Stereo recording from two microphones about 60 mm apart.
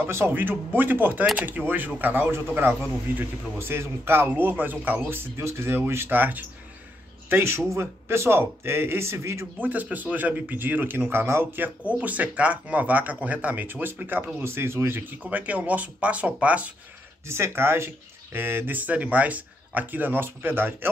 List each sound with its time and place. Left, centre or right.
0.3 s speech: right
2.3 s speech: right
4.3 s speech: right
5.4 s speech: right
6.0 s speech: right
7.4 s speech: right
9.6 s speech: right
11.9 s speech: right
15.2 s speech: right
17.3 s speech: right